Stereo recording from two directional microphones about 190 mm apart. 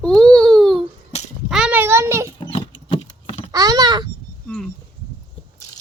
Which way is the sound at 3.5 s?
20° right (ahead or behind).